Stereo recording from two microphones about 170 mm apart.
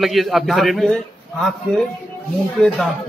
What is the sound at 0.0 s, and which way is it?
Speech, centre (ahead or behind).